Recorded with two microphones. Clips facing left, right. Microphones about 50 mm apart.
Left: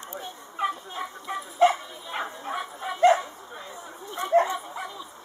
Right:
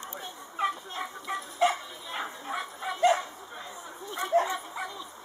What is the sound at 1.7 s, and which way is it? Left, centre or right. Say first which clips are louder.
Bow-wow: left 3 dB; centre.